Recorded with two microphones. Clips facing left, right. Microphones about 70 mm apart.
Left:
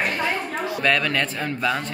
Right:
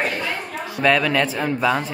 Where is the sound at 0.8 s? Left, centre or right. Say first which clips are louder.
Right 5 dB; centre.